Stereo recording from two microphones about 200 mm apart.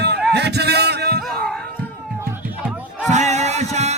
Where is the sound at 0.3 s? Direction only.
55° right (ahead or behind).